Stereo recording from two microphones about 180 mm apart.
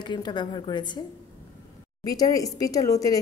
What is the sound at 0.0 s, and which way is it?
A woman's voice, 25° left (ahead or behind).